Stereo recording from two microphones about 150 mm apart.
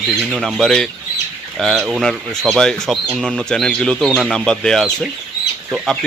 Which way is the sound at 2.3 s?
5° left (ahead or behind).